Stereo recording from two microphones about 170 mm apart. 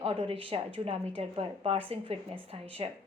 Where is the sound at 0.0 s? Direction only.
30° right (ahead or behind).